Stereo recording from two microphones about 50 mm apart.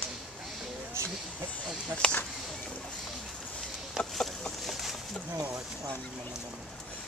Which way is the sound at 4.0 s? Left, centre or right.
Centre.